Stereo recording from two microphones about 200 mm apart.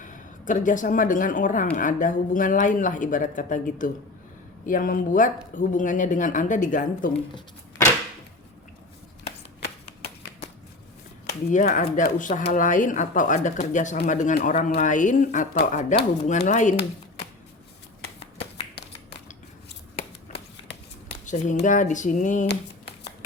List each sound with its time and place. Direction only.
0.0 s speech: 40° left (ahead or behind)
9.2 s a sound: 50° left (ahead or behind)
11.5 s speech: 40° left (ahead or behind)
21.6 s speech: 40° left (ahead or behind)